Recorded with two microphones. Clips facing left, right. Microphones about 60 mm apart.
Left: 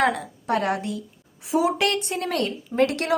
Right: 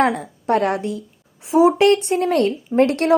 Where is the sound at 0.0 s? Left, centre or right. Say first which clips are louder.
Right 4 dB; right.